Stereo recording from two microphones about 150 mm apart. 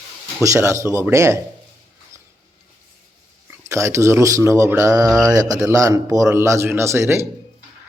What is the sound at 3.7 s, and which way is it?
A man's voice, 20° right (ahead or behind).